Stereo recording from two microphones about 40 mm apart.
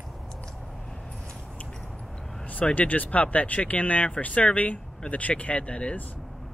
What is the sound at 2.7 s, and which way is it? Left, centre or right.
Speech, left.